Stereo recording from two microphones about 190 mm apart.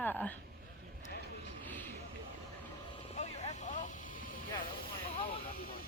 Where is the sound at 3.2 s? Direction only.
35° left (ahead or behind).